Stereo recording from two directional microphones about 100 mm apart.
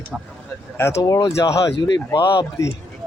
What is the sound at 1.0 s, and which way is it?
Speech, 40° left (ahead or behind).